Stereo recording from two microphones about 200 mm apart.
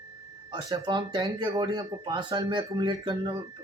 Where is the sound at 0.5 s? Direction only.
20° right (ahead or behind).